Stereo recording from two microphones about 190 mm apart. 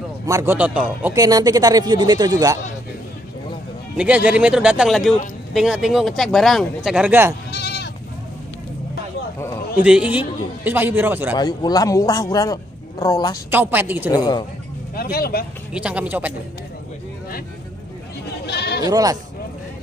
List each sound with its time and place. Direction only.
0.3 s a man's voice: 10° right (ahead or behind)
1.1 s speech: 20° right (ahead or behind)
3.9 s speech: 5° right (ahead or behind)
7.5 s goat: 60° left (ahead or behind)
9.8 s a man's voice: 5° right (ahead or behind)
11.3 s speech: 20° left (ahead or behind)
13.5 s a man's voice: 10° right (ahead or behind)
14.1 s speech: 20° left (ahead or behind)
15.0 s speech: 55° left (ahead or behind)
15.7 s a man's voice: 5° right (ahead or behind)
18.4 s sheep: 60° left (ahead or behind)
18.9 s speech: 20° right (ahead or behind)